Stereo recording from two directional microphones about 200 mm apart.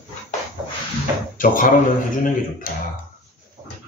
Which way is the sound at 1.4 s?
45° left (ahead or behind).